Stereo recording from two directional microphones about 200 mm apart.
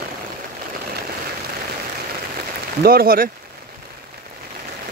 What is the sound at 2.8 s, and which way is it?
Speech, 50° right (ahead or behind).